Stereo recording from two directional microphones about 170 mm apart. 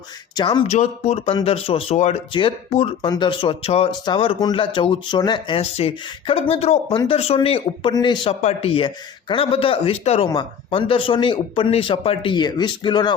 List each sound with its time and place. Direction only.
0.3 s speech: 25° left (ahead or behind)
0.7 s speech: 40° left (ahead or behind)